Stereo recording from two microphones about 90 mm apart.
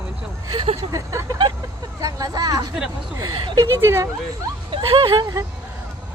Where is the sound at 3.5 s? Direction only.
30° right (ahead or behind).